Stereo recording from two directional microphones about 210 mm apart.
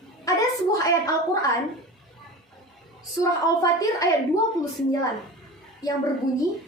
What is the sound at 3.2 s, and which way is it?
Speech, 15° left (ahead or behind).